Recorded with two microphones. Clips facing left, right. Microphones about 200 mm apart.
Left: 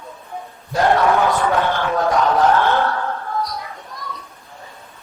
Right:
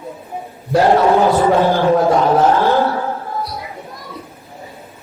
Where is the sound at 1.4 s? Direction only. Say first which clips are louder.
Right 6 dB; 30° right (ahead or behind).